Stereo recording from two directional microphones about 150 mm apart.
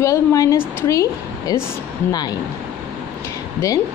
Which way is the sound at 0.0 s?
20° left (ahead or behind).